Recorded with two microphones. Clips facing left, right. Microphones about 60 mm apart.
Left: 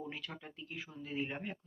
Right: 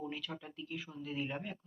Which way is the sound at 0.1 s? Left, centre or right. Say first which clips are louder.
Right 3 dB; left.